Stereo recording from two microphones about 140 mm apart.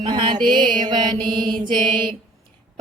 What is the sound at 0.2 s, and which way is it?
Music, 35° right (ahead or behind).